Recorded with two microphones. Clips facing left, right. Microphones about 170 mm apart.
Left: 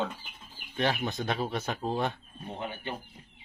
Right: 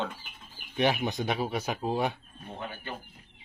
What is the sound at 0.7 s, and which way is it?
Speech, 15° right (ahead or behind).